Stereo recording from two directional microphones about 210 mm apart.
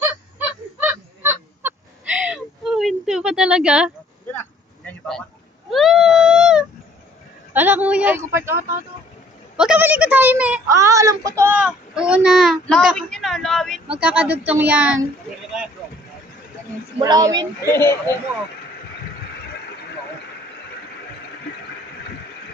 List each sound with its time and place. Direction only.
0.1 s honk: 10° right (ahead or behind)
4.3 s a sound: 10° left (ahead or behind)
5.7 s a child's voice: centre (ahead or behind)
9.6 s a child's voice: 5° right (ahead or behind)
17.0 s speech: 20° right (ahead or behind)
17.6 s speech: 10° left (ahead or behind)